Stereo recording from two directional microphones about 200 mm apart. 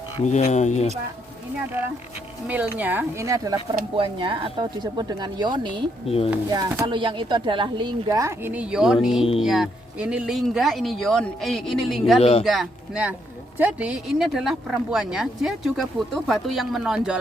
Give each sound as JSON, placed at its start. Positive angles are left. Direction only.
{"t": 0.2, "sound": "speech", "side_deg": 35}
{"t": 2.5, "sound": "speech", "side_deg": -10}
{"t": 6.1, "sound": "speech", "side_deg": 30}
{"t": 6.3, "sound": "speech", "side_deg": -15}
{"t": 12.2, "sound": "speech", "side_deg": 30}
{"t": 12.5, "sound": "speech", "side_deg": 0}